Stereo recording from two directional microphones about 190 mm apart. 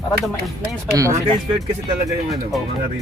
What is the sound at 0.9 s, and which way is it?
Speech, 15° right (ahead or behind).